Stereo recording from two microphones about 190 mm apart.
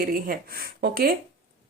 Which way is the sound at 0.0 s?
55° right (ahead or behind).